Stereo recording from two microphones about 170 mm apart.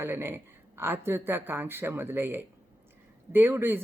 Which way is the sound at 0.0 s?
15° right (ahead or behind).